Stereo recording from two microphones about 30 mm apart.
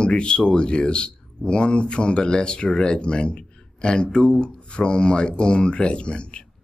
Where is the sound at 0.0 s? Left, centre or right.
Left.